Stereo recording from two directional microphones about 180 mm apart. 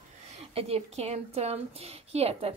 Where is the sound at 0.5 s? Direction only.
35° right (ahead or behind).